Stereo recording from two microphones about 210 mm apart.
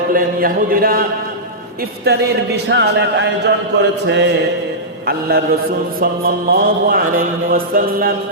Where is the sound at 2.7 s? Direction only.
55° right (ahead or behind).